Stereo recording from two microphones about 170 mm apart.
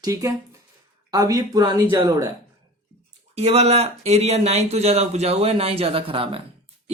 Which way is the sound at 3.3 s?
40° right (ahead or behind).